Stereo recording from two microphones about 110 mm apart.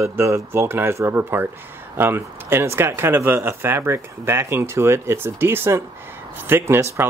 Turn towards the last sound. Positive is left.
turn(degrees=-20)  # may be behind; listen again after turning